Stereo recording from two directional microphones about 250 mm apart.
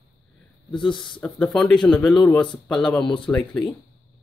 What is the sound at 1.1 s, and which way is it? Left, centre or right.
Speech, centre.